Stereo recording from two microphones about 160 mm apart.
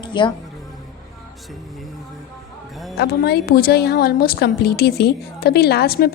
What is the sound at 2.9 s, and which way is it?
A woman's voice, 90° left.